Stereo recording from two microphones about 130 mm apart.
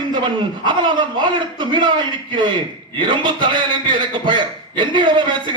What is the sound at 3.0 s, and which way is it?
A man's voice, 35° right (ahead or behind).